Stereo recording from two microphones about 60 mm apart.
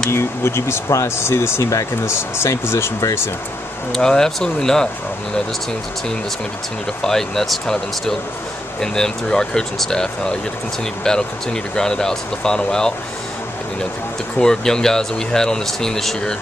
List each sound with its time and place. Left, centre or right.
0.1 s speech: left
2.1 s speech: left
3.9 s speech: centre
7.0 s speech: centre
14.4 s speech: centre